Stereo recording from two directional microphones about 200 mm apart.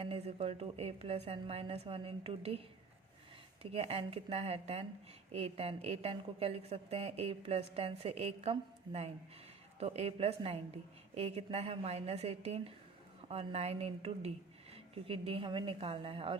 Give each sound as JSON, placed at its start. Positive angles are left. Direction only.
{"t": 0.0, "sound": "a woman's voice", "side_deg": -30}
{"t": 3.6, "sound": "a woman's voice", "side_deg": -30}